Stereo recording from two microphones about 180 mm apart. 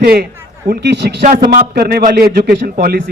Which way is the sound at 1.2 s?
50° right (ahead or behind).